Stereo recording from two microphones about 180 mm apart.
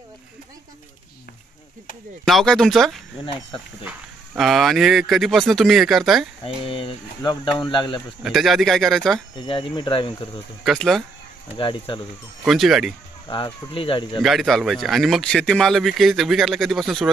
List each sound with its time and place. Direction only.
2.2 s speech: centre (ahead or behind)
4.4 s speech: centre (ahead or behind)
6.6 s speech: 30° left (ahead or behind)
8.2 s speech: centre (ahead or behind)
9.3 s speech: 25° left (ahead or behind)
10.6 s speech: centre (ahead or behind)
11.5 s speech: 30° left (ahead or behind)
12.4 s speech: centre (ahead or behind)
13.3 s speech: 25° left (ahead or behind)
14.2 s speech: centre (ahead or behind)